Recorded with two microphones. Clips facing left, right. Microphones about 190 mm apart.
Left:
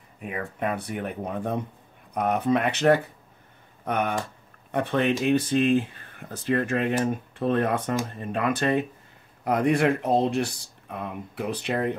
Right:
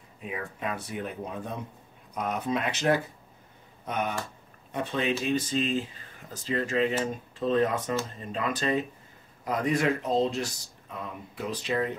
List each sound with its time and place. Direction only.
0.2 s speech: 60° left (ahead or behind)